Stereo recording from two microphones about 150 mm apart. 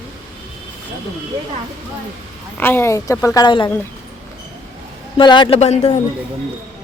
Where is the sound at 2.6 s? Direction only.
15° left (ahead or behind).